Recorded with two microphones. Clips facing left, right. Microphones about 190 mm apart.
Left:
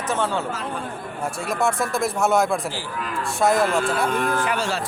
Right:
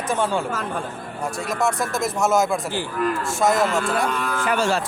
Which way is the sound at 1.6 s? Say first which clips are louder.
Left 1 dB; centre (ahead or behind).